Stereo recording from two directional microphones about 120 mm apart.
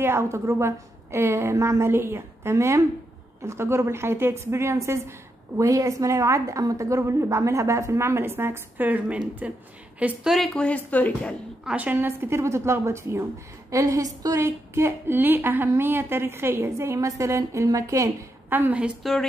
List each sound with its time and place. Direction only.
0.0 s a woman's voice: 20° right (ahead or behind)
10.5 s speech: 10° left (ahead or behind)
11.6 s a woman's voice: 10° right (ahead or behind)
18.5 s a woman's voice: 15° right (ahead or behind)